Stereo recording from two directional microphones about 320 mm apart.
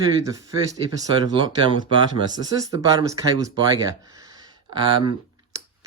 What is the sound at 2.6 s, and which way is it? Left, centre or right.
Speech, centre.